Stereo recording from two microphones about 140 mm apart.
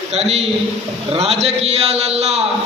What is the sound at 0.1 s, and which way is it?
A man's voice, 50° right (ahead or behind).